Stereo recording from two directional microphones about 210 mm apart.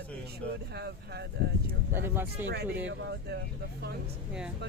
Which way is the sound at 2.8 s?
60° right (ahead or behind).